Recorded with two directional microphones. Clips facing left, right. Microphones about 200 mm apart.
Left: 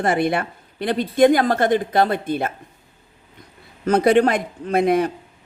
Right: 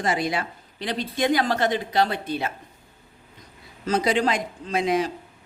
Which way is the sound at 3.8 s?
55° left (ahead or behind).